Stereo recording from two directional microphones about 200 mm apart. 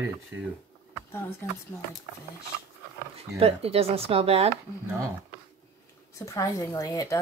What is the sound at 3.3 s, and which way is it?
Speech, 30° right (ahead or behind).